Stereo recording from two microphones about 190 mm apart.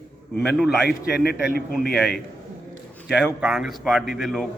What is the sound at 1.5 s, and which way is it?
Speech, 55° left (ahead or behind).